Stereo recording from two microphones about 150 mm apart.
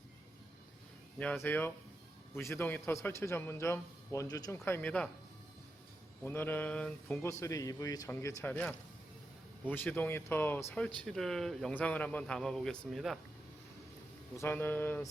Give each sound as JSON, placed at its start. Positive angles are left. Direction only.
{"t": 1.2, "sound": "speech", "side_deg": 10}
{"t": 6.2, "sound": "speech", "side_deg": 15}
{"t": 9.6, "sound": "speech", "side_deg": 10}
{"t": 14.3, "sound": "speech", "side_deg": 15}